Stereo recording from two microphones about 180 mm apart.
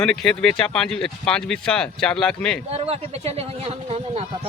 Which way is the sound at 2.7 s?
35° right (ahead or behind).